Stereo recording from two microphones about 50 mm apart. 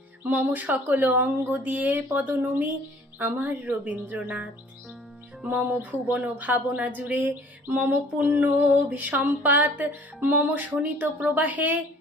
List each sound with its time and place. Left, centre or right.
0.3 s speech: right
5.5 s speech: right
7.9 s a sound: right
8.4 s speech: right